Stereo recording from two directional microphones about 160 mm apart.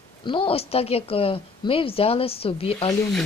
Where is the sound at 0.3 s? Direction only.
35° left (ahead or behind).